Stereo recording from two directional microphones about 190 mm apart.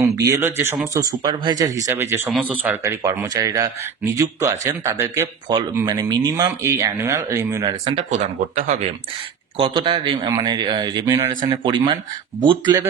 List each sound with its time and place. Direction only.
0.0 s speech: 15° right (ahead or behind)
7.8 s speech: 35° right (ahead or behind)
9.6 s speech: 25° right (ahead or behind)